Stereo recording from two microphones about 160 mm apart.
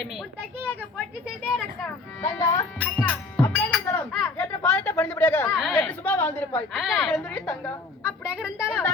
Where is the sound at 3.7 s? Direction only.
Centre (ahead or behind).